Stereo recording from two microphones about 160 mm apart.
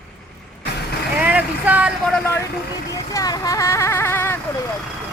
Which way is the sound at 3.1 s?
20° left (ahead or behind).